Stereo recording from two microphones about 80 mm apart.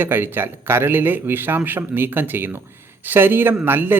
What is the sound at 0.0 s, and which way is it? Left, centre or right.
Speech, right.